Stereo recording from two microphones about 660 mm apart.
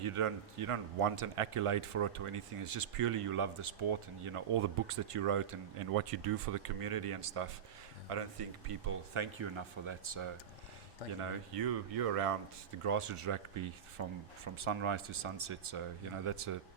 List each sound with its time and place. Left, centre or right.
0.0 s speech: right
11.2 s speech: right